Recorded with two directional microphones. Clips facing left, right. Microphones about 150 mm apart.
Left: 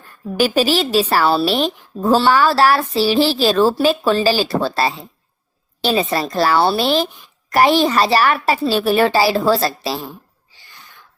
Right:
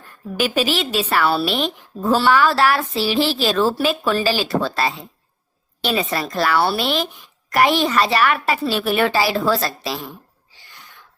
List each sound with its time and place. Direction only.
0.3 s a woman's voice: 35° left (ahead or behind)